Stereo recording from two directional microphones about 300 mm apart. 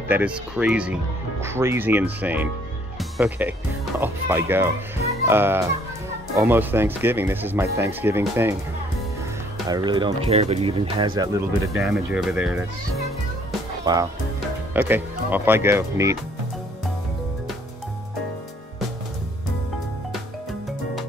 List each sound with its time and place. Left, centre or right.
0.1 s speech: centre
9.7 s speech: centre
11.7 s speech: centre
14.7 s speech: centre